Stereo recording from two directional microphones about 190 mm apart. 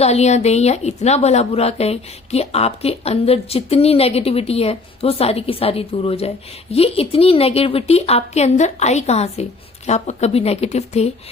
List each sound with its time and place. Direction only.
0.0 s a woman's voice: 35° left (ahead or behind)